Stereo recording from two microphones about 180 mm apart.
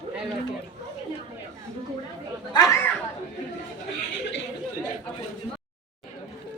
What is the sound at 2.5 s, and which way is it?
Chatter, 20° left (ahead or behind).